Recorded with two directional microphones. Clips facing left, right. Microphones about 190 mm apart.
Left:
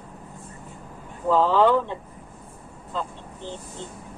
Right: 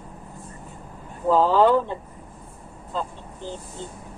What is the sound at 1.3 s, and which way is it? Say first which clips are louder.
Speech: right 1 dB; 40° right (ahead or behind).